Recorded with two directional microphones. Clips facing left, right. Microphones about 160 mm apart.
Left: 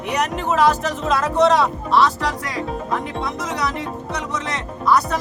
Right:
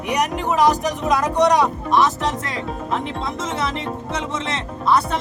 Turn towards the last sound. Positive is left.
turn(degrees=-25)  # may be behind; listen again after turning